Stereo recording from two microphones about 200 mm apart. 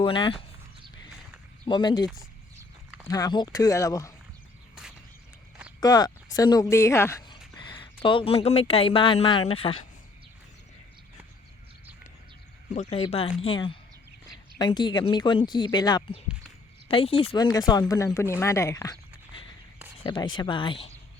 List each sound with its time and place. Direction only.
0.0 s speech: 25° left (ahead or behind)
1.6 s speech: 20° left (ahead or behind)
3.1 s speech: 20° left (ahead or behind)
4.7 s a sound: 5° right (ahead or behind)
5.8 s a woman's voice: 20° left (ahead or behind)
12.7 s speech: 30° left (ahead or behind)